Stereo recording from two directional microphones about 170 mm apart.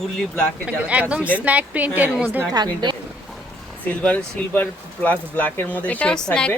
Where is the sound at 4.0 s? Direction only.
5° left (ahead or behind).